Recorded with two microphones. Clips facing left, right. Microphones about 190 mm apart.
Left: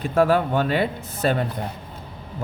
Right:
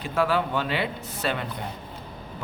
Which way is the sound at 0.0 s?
45° left (ahead or behind).